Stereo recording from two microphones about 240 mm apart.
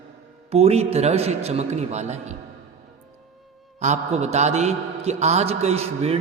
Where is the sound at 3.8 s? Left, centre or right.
Right.